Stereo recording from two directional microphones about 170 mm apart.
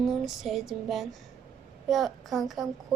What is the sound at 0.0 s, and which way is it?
A woman's voice, centre (ahead or behind).